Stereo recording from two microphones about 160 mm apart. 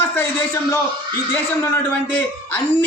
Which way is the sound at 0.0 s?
15° left (ahead or behind).